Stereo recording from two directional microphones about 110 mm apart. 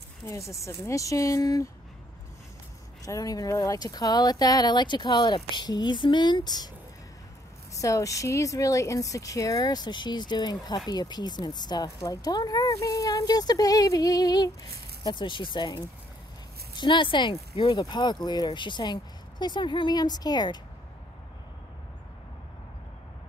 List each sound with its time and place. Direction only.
0.3 s speech: 30° left (ahead or behind)
3.1 s speech: 30° left (ahead or behind)
7.7 s speech: 30° left (ahead or behind)
15.0 s speech: 45° left (ahead or behind)